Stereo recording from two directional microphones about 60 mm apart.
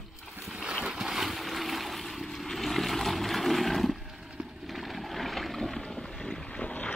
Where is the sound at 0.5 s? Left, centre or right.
Centre.